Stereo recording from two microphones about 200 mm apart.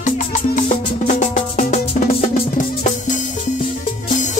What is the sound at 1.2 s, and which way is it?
Music, 40° left (ahead or behind).